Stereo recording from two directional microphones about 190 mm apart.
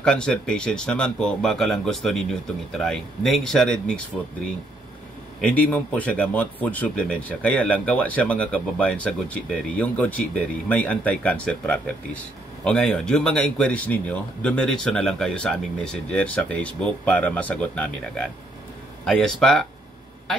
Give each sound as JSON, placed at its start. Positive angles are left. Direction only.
{"t": 0.0, "sound": "speech", "side_deg": 5}
{"t": 5.4, "sound": "speech", "side_deg": 5}